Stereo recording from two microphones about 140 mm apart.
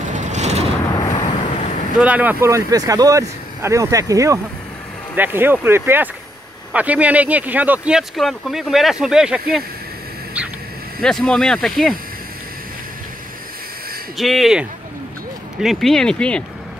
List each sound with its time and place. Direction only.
0.1 s vehicle: 55° right (ahead or behind)
1.1 s vehicle: 40° left (ahead or behind)
2.0 s speech: 10° right (ahead or behind)
11.0 s speech: 5° left (ahead or behind)
14.1 s speech: centre (ahead or behind)